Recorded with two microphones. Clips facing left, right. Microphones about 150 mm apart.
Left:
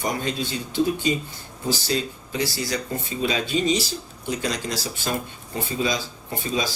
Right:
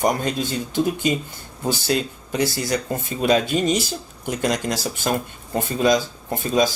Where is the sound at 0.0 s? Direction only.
50° right (ahead or behind).